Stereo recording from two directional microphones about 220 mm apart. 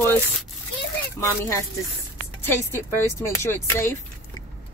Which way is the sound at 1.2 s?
10° left (ahead or behind).